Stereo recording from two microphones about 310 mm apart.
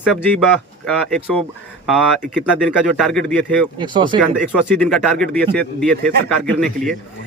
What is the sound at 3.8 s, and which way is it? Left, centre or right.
Speech, centre.